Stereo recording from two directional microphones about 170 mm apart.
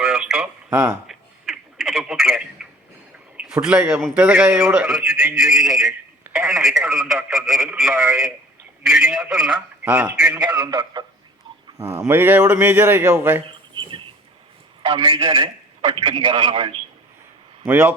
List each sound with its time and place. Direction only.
0.0 s a sound: 5° right (ahead or behind)
1.0 s telephone: centre (ahead or behind)
3.3 s speech: 5° right (ahead or behind)
5.8 s a sound: 5° right (ahead or behind)
6.7 s speech: 15° right (ahead or behind)
7.1 s speech: centre (ahead or behind)
7.3 s speech: 20° right (ahead or behind)
7.6 s speech: centre (ahead or behind)
10.6 s a man's voice: 25° right (ahead or behind)
13.5 s a sound: 30° right (ahead or behind)
14.8 s a man's voice: 30° right (ahead or behind)
17.7 s speech: 10° right (ahead or behind)